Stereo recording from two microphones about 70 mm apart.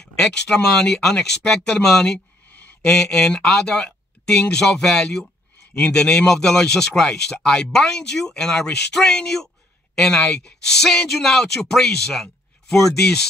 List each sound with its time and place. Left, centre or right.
0.1 s speech: centre
2.1 s a sound: left
2.8 s speech: centre